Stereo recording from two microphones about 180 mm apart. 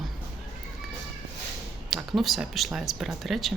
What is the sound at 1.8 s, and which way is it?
Speech, centre (ahead or behind).